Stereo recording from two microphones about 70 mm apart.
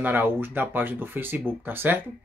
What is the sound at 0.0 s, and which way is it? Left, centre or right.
Speech, right.